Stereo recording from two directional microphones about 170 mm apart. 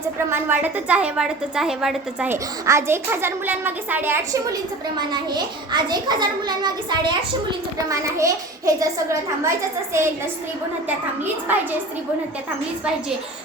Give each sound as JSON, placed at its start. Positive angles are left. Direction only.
{"t": 0.3, "sound": "a woman's voice", "side_deg": -10}
{"t": 4.9, "sound": "a child's voice", "side_deg": -25}
{"t": 10.8, "sound": "a woman's voice", "side_deg": -10}